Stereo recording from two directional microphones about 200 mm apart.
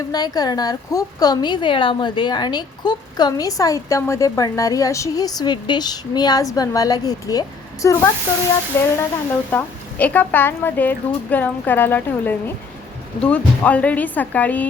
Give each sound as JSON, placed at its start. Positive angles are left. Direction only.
{"t": 0.1, "sound": "a woman's voice", "side_deg": 20}